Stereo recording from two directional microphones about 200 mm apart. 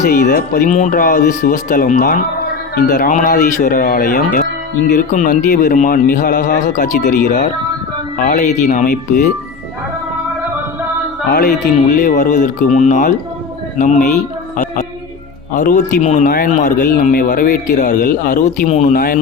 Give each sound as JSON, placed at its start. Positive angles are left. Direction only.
{"t": 0.3, "sound": "a man's voice", "side_deg": 45}
{"t": 11.9, "sound": "a man's voice", "side_deg": 40}
{"t": 15.5, "sound": "a man's voice", "side_deg": 40}